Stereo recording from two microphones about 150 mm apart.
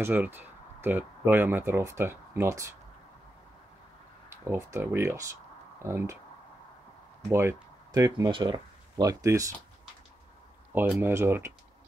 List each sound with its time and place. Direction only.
0.0 s speech: 15° right (ahead or behind)
4.5 s speech: 20° right (ahead or behind)
7.2 s speech: 20° right (ahead or behind)
11.0 s speech: 15° right (ahead or behind)